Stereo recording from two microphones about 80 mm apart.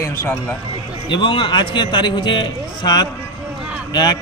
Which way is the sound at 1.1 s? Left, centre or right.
Left.